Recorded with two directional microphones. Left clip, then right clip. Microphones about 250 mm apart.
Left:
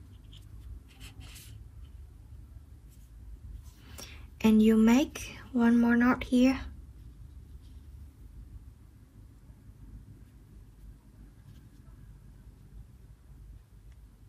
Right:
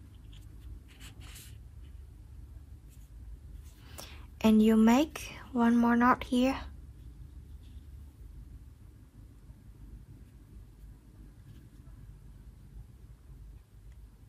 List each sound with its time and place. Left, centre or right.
4.0 s speech: centre